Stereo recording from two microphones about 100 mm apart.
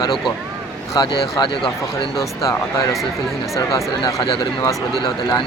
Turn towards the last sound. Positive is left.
turn(degrees=35)  # may be behind; listen again after turning